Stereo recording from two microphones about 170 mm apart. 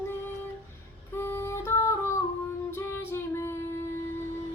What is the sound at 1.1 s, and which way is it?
Music, 15° left (ahead or behind).